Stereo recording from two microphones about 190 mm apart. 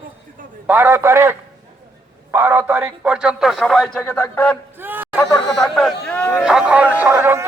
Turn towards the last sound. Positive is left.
turn(degrees=-10)  # may be behind; listen again after turning